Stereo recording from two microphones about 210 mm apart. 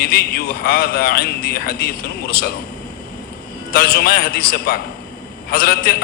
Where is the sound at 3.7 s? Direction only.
50° left (ahead or behind).